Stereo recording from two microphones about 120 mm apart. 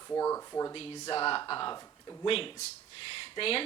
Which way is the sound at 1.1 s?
45° left (ahead or behind).